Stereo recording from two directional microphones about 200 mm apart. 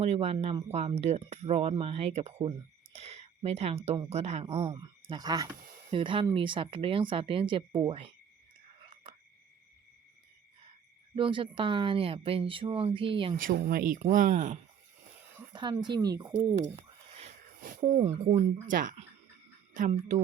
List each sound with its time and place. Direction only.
0.0 s speech: 30° right (ahead or behind)
2.9 s a sound: 30° right (ahead or behind)
3.8 s speech: 30° right (ahead or behind)
4.6 s speech: 20° right (ahead or behind)
11.1 s speech: 25° right (ahead or behind)
13.3 s speech: 45° right (ahead or behind)
15.5 s speech: 20° right (ahead or behind)
16.6 s speech: 35° right (ahead or behind)